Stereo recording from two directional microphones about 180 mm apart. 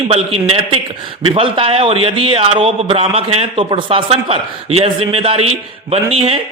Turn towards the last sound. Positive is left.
turn(degrees=-35)  # may be behind; listen again after turning